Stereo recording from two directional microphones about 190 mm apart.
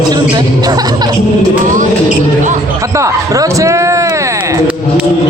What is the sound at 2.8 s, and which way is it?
Speech, 15° right (ahead or behind).